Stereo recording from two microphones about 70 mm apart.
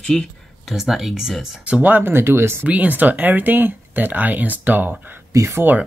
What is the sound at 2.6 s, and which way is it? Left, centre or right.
Speech, right.